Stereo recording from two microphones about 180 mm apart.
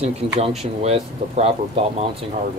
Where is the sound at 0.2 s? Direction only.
30° right (ahead or behind).